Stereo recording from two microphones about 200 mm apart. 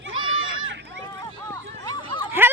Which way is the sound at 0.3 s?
80° right.